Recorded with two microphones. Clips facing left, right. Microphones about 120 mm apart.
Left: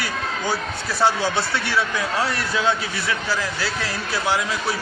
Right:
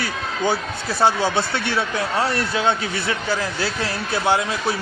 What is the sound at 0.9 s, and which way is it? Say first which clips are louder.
A man's voice: right 2 dB; 15° right (ahead or behind).